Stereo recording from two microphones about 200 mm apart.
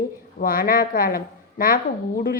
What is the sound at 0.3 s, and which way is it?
A woman's voice, 45° left (ahead or behind).